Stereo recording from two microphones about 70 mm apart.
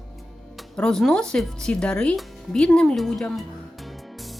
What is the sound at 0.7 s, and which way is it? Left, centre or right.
Speech, centre.